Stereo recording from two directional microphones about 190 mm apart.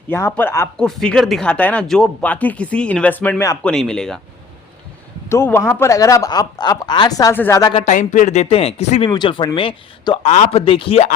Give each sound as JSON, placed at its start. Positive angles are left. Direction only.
{"t": 0.1, "sound": "speech", "side_deg": 10}
{"t": 5.3, "sound": "speech", "side_deg": 15}
{"t": 7.9, "sound": "speech", "side_deg": 40}
{"t": 9.0, "sound": "speech", "side_deg": 25}